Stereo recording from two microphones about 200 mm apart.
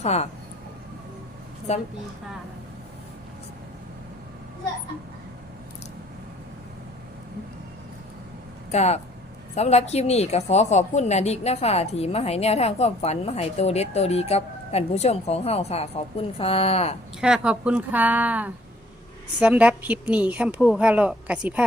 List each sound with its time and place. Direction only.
0.0 s a woman's voice: 30° left (ahead or behind)
1.7 s a woman's voice: 30° left (ahead or behind)
8.7 s a woman's voice: 35° left (ahead or behind)
17.2 s a woman's voice: 5° right (ahead or behind)